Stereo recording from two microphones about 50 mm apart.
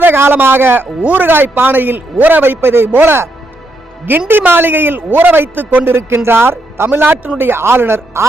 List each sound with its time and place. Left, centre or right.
0.0 s a man's voice: right
1.0 s speech: right
1.3 s a man's voice: right
2.6 s a man's voice: right
4.3 s a man's voice: right
6.0 s a man's voice: right